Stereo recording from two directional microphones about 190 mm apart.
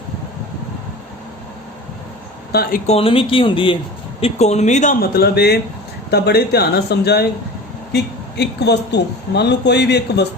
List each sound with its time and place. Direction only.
2.5 s speech: 50° left (ahead or behind)
2.9 s speech: 30° left (ahead or behind); by 10.2 s 60° left (ahead or behind)